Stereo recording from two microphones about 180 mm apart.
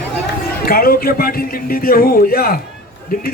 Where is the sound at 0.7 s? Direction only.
55° left (ahead or behind).